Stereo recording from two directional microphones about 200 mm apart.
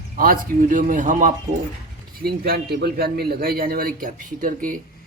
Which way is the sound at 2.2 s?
50° right (ahead or behind).